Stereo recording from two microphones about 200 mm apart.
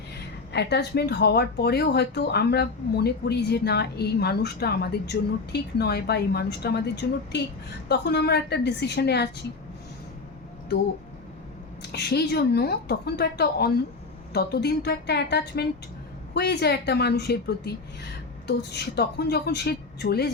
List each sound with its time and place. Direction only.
0.5 s a woman's voice: 55° left (ahead or behind)
11.8 s a woman's voice: 55° left (ahead or behind)